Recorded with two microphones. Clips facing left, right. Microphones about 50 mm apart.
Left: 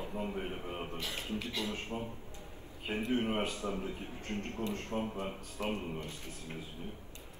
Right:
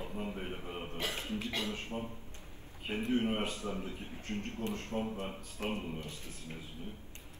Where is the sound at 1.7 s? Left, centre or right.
Left.